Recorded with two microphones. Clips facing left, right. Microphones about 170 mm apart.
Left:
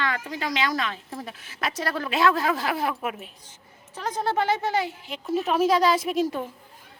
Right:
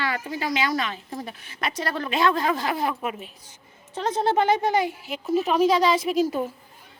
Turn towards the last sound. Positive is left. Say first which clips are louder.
# right 2 dB
turn(degrees=0)  # may be behind; listen again after turning